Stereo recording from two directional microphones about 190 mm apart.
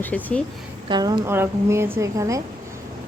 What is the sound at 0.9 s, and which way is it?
A woman's voice, 20° right (ahead or behind).